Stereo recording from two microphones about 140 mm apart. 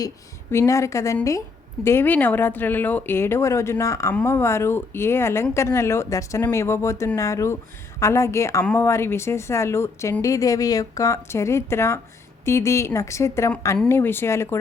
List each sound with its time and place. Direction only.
0.5 s speech: 20° left (ahead or behind)